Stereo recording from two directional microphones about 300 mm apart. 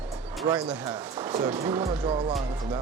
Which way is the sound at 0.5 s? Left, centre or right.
Centre.